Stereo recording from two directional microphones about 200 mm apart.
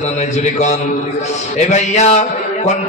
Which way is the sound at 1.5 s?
35° left (ahead or behind).